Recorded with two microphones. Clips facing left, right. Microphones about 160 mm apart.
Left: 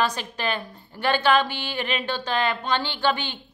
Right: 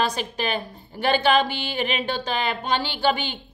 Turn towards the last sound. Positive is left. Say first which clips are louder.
# right 2 dB
turn(degrees=-15)  # may be behind; listen again after turning